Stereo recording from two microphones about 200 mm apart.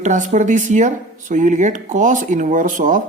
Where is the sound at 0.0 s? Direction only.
35° right (ahead or behind).